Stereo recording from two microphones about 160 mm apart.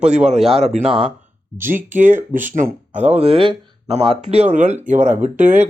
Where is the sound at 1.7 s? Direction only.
55° right (ahead or behind).